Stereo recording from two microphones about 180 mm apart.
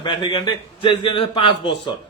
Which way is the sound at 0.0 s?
25° left (ahead or behind).